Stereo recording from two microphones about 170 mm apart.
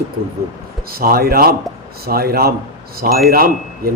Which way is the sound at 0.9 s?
60° right (ahead or behind).